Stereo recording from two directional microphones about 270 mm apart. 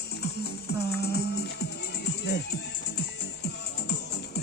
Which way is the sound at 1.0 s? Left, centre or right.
Left.